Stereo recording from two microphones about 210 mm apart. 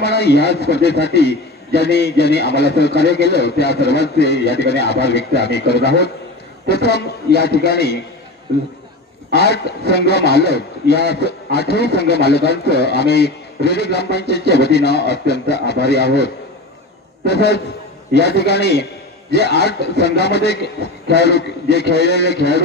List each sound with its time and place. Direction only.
0.0 s a man's voice: 55° left (ahead or behind)
8.5 s speech: 50° right (ahead or behind)
9.3 s a man's voice: 50° left (ahead or behind)
17.3 s a man's voice: 55° left (ahead or behind)